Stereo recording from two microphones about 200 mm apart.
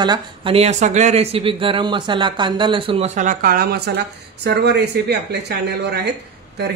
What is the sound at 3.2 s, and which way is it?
Speech, 45° right (ahead or behind).